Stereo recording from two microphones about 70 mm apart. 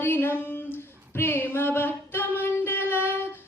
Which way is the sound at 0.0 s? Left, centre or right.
Left.